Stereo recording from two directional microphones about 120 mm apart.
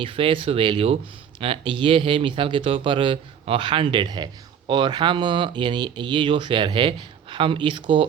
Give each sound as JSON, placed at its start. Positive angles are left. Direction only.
{"t": 0.0, "sound": "a man's voice", "side_deg": -50}